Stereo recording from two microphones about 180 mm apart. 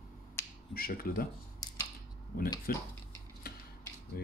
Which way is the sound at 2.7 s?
55° left (ahead or behind).